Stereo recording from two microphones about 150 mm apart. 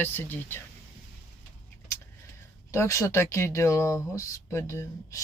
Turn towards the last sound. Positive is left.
turn(degrees=20)  # may be behind; listen again after turning